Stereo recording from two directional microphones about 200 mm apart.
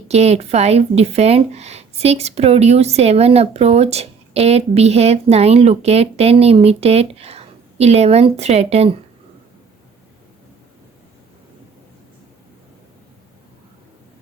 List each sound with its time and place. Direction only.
0.1 s speech: 30° right (ahead or behind)